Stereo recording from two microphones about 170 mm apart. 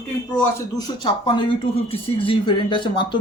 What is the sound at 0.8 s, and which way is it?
Speech, 30° left (ahead or behind).